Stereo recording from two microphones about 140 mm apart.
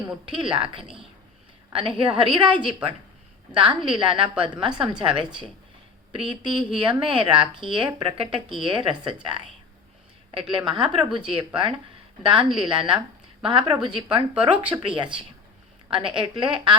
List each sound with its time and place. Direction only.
0.3 s speech: 35° right (ahead or behind)
2.0 s speech: 35° right (ahead or behind)
10.6 s speech: 30° right (ahead or behind)